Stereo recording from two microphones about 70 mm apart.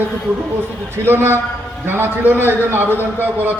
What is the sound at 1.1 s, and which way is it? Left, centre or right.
A man's voice, right.